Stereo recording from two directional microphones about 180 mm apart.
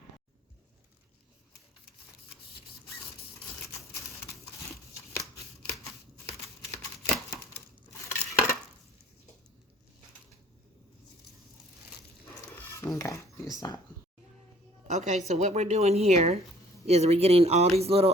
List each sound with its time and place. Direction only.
7.9 s cutlery: 15° left (ahead or behind)
12.2 s a sound: 15° left (ahead or behind)
13.0 s speech: 15° left (ahead or behind)
14.8 s a woman's voice: 40° right (ahead or behind)